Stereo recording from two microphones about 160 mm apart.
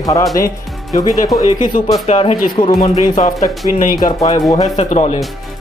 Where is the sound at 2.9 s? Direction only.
50° left (ahead or behind).